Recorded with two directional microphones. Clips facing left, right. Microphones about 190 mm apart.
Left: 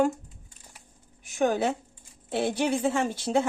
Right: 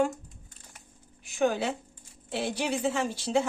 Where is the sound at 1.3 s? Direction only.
45° left (ahead or behind).